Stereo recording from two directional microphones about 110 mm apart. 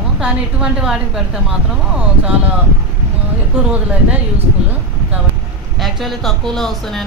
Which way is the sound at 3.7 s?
10° right (ahead or behind).